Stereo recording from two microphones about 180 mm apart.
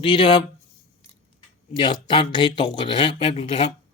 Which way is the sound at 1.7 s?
25° left (ahead or behind).